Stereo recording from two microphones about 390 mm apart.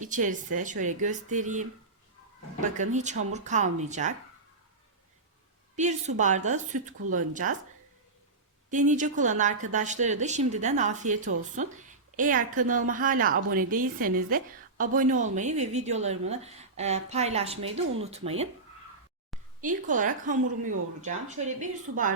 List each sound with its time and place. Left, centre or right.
0.0 s a woman's voice: centre
2.7 s speech: centre
5.7 s a woman's voice: centre
8.9 s a woman's voice: centre
19.6 s a woman's voice: centre